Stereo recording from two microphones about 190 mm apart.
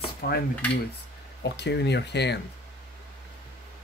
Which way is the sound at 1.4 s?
60° left (ahead or behind).